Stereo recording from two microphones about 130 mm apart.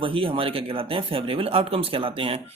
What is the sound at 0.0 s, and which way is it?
Speech, 45° right (ahead or behind).